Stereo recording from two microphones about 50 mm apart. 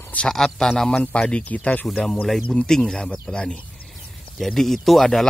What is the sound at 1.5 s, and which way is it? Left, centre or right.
Speech, left.